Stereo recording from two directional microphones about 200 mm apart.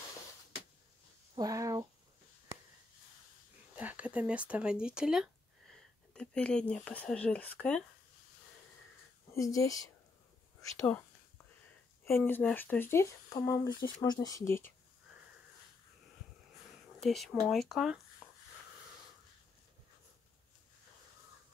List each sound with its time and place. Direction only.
1.3 s a sound: 15° right (ahead or behind)
3.7 s speech: 5° right (ahead or behind)
9.3 s speech: 15° left (ahead or behind)
10.8 s speech: 10° left (ahead or behind)
17.0 s speech: centre (ahead or behind)